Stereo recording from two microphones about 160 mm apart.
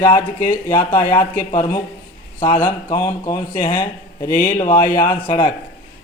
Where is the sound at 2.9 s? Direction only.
20° left (ahead or behind).